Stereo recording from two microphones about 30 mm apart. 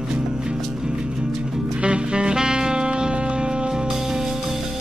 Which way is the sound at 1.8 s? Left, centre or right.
Right.